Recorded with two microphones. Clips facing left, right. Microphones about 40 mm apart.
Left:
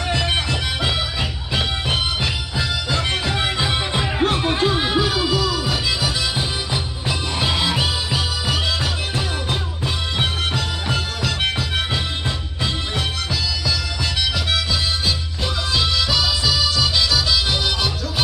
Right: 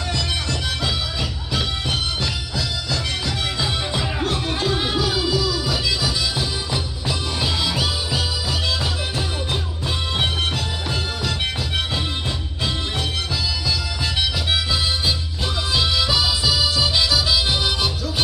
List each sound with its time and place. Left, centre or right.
0.1 s music: left
10.1 s music: centre
14.5 s harmonica: centre
15.7 s music: centre